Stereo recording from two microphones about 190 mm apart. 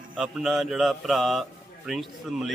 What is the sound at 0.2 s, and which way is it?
A man's voice, centre (ahead or behind).